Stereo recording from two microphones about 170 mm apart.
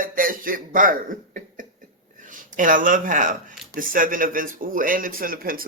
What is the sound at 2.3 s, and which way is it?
Speech, 50° right (ahead or behind).